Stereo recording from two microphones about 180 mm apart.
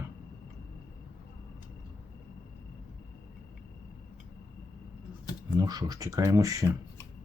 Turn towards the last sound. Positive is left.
turn(degrees=-20)  # may be behind; listen again after turning